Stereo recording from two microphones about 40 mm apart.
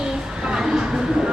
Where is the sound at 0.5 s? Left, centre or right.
Centre.